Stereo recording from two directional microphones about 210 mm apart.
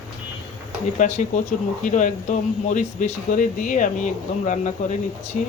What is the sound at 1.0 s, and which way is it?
Speech, 35° left (ahead or behind).